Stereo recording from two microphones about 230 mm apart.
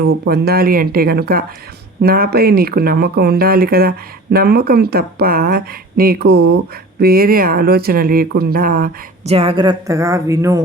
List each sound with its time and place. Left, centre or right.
0.3 s speech: right
9.3 s a woman's voice: right